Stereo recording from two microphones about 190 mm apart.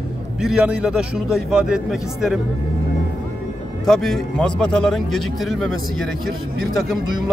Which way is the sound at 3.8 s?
Centre (ahead or behind).